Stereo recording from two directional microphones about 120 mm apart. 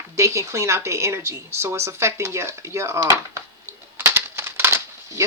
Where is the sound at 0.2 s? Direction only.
25° right (ahead or behind).